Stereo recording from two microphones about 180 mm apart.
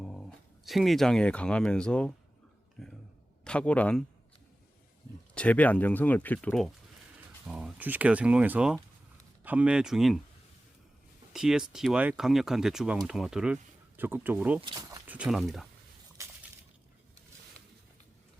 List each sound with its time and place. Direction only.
0.0 s a man's voice: centre (ahead or behind)
5.3 s speech: 5° left (ahead or behind)
7.4 s speech: 5° right (ahead or behind)
11.3 s speech: 5° right (ahead or behind)
14.6 s speech: 25° right (ahead or behind)
14.8 s speech: 10° right (ahead or behind)
16.2 s a sound: 15° right (ahead or behind)